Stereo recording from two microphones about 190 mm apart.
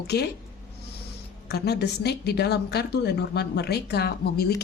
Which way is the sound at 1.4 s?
60° left (ahead or behind).